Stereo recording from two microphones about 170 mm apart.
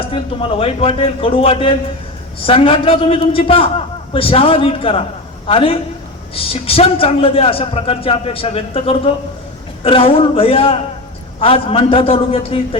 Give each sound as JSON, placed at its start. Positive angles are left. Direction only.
{"t": 0.1, "sound": "a man's voice", "side_deg": 30}